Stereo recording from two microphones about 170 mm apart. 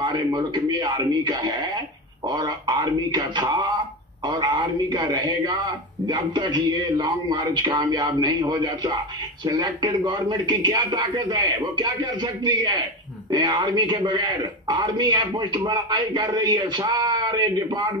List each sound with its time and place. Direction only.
0.0 s a man's voice: 25° right (ahead or behind)